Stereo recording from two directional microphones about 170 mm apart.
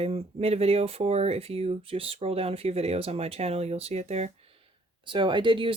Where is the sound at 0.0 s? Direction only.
35° right (ahead or behind).